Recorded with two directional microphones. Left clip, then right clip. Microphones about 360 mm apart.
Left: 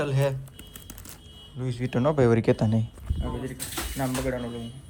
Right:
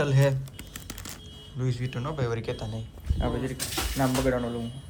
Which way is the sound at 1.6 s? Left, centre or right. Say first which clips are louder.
Left 5 dB; centre.